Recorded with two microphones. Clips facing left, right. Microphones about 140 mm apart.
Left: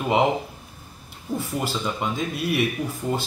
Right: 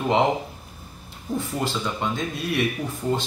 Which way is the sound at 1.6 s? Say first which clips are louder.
Even; 5° left (ahead or behind).